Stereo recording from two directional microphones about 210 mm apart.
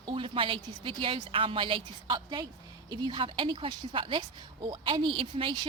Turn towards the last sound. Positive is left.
turn(degrees=-25)  # may be behind; listen again after turning